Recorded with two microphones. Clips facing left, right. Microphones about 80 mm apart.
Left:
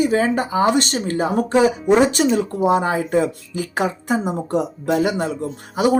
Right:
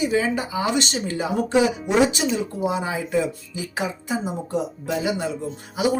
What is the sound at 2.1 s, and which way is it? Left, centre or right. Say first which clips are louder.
Speech: left 6 dB; left.